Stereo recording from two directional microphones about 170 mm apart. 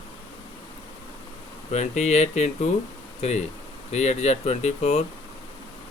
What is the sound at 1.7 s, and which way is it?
Speech, 40° left (ahead or behind).